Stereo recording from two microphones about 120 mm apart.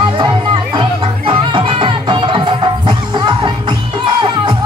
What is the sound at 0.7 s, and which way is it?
Music, 45° right (ahead or behind).